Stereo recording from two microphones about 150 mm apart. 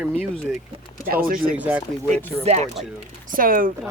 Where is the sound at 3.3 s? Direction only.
70° right (ahead or behind).